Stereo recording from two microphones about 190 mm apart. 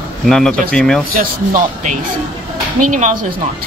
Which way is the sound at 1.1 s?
45° right (ahead or behind).